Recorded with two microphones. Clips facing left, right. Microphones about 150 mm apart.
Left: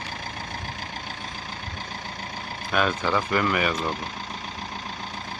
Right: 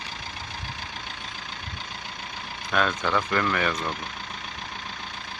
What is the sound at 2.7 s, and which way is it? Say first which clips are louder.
Speech: left 1 dB; 5° left (ahead or behind).